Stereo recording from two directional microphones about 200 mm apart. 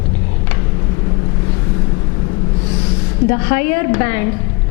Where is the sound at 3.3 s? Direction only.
15° left (ahead or behind).